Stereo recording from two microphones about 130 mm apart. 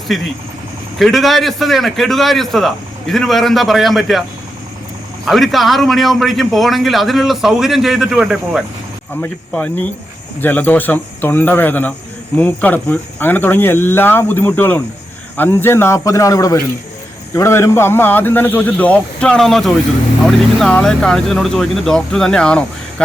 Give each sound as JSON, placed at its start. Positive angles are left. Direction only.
{"t": 0.1, "sound": "a man's voice", "side_deg": 0}
{"t": 5.2, "sound": "a man's voice", "side_deg": 0}
{"t": 9.5, "sound": "a man's voice", "side_deg": 10}